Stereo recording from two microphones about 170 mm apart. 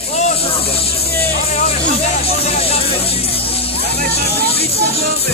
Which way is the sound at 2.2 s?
35° left (ahead or behind).